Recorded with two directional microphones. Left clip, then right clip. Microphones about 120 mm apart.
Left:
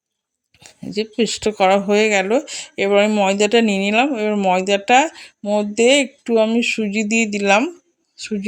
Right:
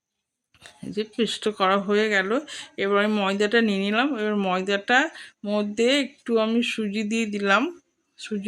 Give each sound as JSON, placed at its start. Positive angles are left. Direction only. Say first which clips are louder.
{"t": 0.6, "sound": "speech", "louder": "left 6 dB", "side_deg": 35}
{"t": 5.4, "sound": "speech", "louder": "left 7 dB", "side_deg": 20}
{"t": 5.7, "sound": "speech", "louder": "left 8 dB", "side_deg": 35}